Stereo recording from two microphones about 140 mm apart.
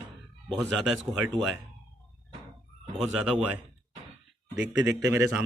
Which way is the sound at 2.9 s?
Centre (ahead or behind).